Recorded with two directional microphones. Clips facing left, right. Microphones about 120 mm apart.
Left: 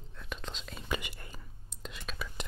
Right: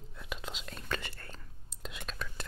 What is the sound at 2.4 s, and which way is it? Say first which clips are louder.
Whispering: left 2 dB; 15° left (ahead or behind).